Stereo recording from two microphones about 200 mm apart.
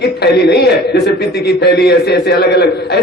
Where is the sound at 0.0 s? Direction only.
55° left (ahead or behind).